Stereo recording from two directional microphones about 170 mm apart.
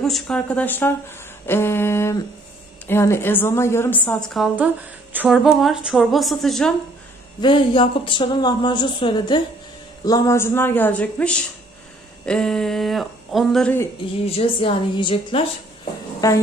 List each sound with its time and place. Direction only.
0.0 s a woman's voice: 5° left (ahead or behind)
5.1 s speech: 5° right (ahead or behind)
7.4 s a woman's voice: 30° left (ahead or behind); by 13.7 s 5° left (ahead or behind)
14.2 s a woman's voice: 35° left (ahead or behind)
16.2 s speech: 20° left (ahead or behind)